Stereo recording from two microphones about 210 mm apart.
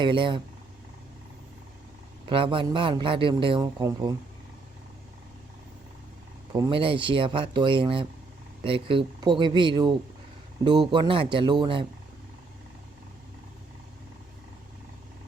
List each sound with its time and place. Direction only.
0.0 s a man's voice: 25° right (ahead or behind)
2.2 s a man's voice: 25° right (ahead or behind)
6.5 s a man's voice: 25° right (ahead or behind)